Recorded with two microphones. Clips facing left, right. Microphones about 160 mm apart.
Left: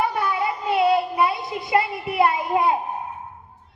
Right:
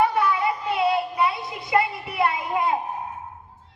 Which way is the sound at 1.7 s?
25° left (ahead or behind).